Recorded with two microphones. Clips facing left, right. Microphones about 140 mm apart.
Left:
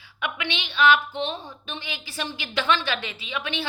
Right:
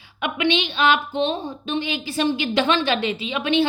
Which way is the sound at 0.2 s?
20° right (ahead or behind).